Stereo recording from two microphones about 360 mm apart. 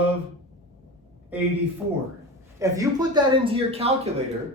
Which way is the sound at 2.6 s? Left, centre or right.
Centre.